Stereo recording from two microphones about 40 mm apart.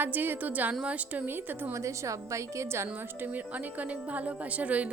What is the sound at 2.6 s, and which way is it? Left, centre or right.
Speech, right.